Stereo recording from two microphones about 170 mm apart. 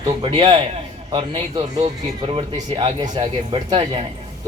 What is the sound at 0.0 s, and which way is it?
A man's voice, 30° right (ahead or behind).